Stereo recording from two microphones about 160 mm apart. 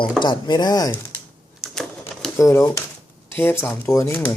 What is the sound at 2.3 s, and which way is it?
Speech, 20° left (ahead or behind).